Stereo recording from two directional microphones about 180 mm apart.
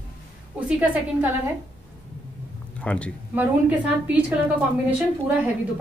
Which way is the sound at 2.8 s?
5° left (ahead or behind).